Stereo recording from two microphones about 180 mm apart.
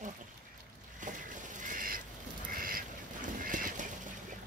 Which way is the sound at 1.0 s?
45° right (ahead or behind).